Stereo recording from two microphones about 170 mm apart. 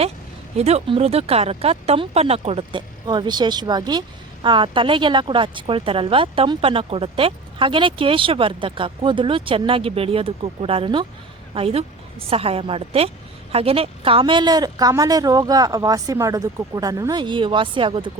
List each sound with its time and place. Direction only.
0.5 s a woman's voice: 40° right (ahead or behind)